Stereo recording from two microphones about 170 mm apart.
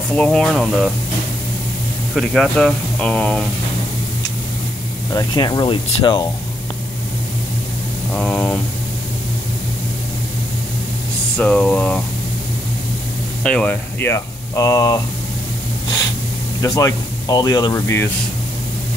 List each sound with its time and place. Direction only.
0.1 s speech: 5° left (ahead or behind)
2.1 s speech: 5° left (ahead or behind)
5.1 s speech: 25° left (ahead or behind)
8.2 s speech: 5° left (ahead or behind)
11.3 s a sound: 5° left (ahead or behind)
13.4 s speech: 5° left (ahead or behind)
16.6 s speech: 20° left (ahead or behind)